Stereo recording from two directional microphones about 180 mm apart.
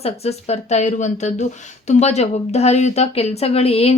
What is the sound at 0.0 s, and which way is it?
Speech, 35° left (ahead or behind).